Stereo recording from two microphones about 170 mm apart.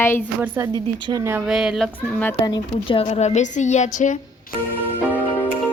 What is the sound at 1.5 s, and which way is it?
Speech, centre (ahead or behind).